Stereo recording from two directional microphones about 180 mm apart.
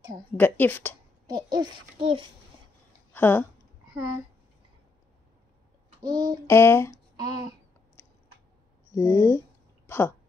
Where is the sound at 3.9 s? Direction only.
15° right (ahead or behind).